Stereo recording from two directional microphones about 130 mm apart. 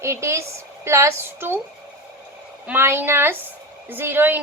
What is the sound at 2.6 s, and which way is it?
A woman's voice, 15° right (ahead or behind).